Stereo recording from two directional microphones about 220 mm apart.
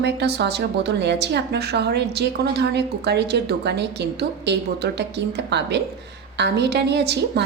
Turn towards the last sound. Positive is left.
turn(degrees=-50)  # may be behind; listen again after turning